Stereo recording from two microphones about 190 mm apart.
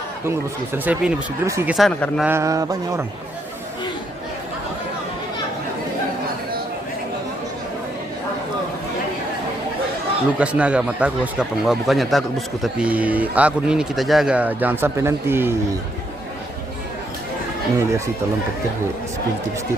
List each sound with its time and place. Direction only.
0.3 s a man's voice: 10° right (ahead or behind)
1.7 s speech: 5° left (ahead or behind)
2.2 s a man's voice: 15° right (ahead or behind)
10.3 s a man's voice: 5° right (ahead or behind)
17.7 s a man's voice: 15° right (ahead or behind)